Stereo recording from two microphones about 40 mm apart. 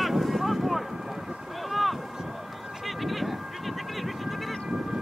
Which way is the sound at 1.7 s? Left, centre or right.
Centre.